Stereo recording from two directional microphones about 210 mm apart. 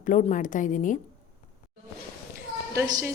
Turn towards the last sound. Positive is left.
turn(degrees=-15)  # may be behind; listen again after turning